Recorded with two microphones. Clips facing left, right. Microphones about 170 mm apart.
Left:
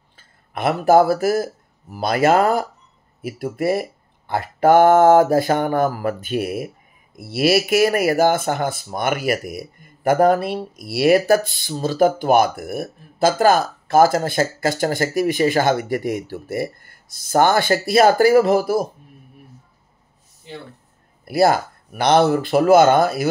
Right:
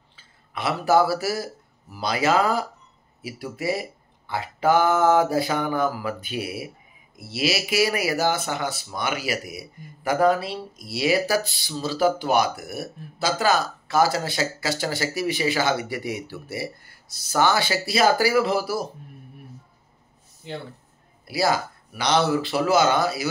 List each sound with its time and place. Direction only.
0.1 s speech: 50° left (ahead or behind)
21.3 s speech: 55° left (ahead or behind)